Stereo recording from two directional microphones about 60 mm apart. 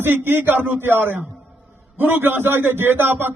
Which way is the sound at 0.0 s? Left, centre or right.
Right.